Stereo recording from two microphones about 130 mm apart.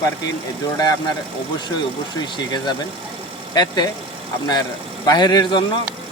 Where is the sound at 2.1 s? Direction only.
35° left (ahead or behind).